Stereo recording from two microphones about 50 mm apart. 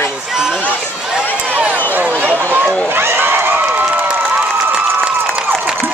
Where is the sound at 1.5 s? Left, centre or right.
Right.